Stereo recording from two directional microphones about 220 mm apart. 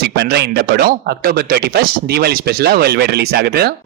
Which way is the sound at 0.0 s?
45° right (ahead or behind).